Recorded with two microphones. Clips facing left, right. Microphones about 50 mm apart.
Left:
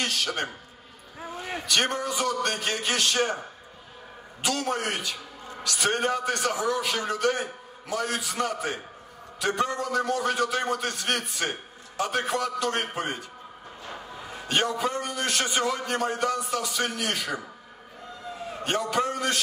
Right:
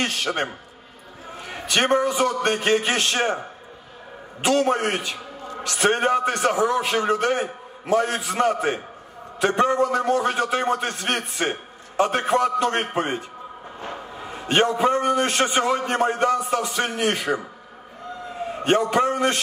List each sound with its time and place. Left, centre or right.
0.0 s a man's voice: right
1.7 s a man's voice: right
4.4 s a man's voice: right
18.5 s a man's voice: right